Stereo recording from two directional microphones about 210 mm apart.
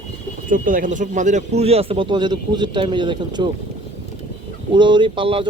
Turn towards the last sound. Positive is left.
turn(degrees=-25)  # may be behind; listen again after turning